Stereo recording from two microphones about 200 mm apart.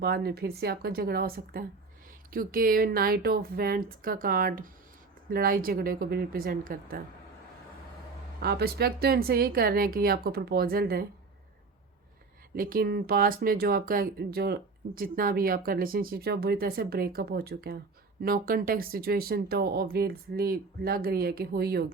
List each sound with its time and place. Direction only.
0.0 s speech: 50° right (ahead or behind)
8.4 s speech: 50° right (ahead or behind)
12.5 s speech: 45° right (ahead or behind)